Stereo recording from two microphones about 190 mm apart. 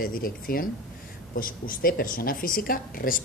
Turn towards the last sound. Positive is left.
turn(degrees=50)  # may be behind; listen again after turning